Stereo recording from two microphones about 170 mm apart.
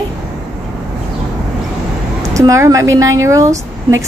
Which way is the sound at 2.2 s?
20° right (ahead or behind).